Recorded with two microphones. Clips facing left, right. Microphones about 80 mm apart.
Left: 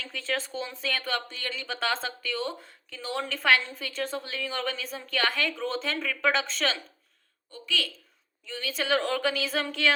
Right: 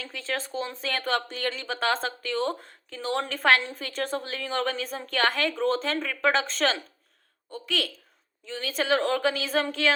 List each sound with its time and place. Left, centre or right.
0.0 s a woman's voice: right
1.0 s speech: right
1.6 s a woman's voice: right
2.0 s speech: right
7.6 s speech: right
8.4 s a woman's voice: right